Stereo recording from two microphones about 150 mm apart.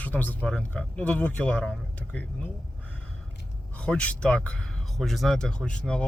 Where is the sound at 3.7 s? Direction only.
10° left (ahead or behind).